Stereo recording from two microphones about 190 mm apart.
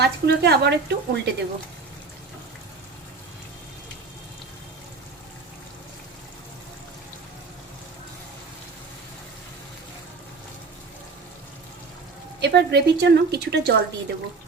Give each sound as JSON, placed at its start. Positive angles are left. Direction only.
{"t": 0.0, "sound": "a woman's voice", "side_deg": -60}
{"t": 12.4, "sound": "a woman's voice", "side_deg": -60}